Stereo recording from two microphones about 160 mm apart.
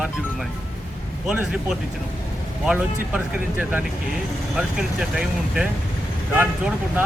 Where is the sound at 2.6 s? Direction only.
10° right (ahead or behind).